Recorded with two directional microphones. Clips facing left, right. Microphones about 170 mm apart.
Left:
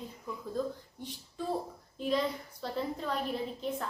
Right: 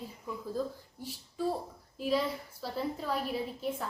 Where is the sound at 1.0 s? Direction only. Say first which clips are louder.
Right 6 dB; 5° right (ahead or behind).